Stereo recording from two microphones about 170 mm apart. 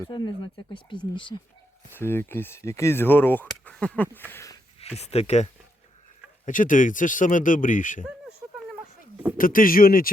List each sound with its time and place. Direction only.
0.0 s speech: 25° left (ahead or behind)
2.0 s speech: 15° left (ahead or behind)
4.9 s speech: 40° left (ahead or behind)
6.4 s speech: 50° left (ahead or behind)
9.4 s speech: 55° left (ahead or behind)